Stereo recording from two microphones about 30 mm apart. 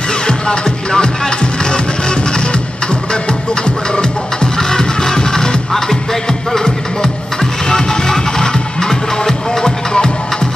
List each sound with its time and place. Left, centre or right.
0.3 s music: left
4.6 s music: centre